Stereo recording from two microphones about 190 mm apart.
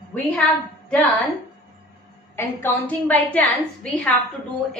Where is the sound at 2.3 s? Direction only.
10° left (ahead or behind).